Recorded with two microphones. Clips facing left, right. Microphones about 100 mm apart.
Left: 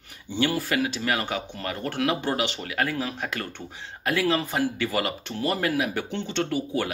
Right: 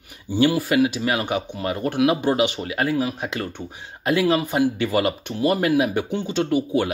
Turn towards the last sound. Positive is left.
turn(degrees=-20)  # may be behind; listen again after turning